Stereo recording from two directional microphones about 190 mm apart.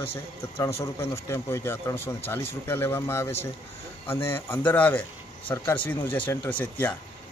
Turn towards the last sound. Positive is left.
turn(degrees=10)  # may be behind; listen again after turning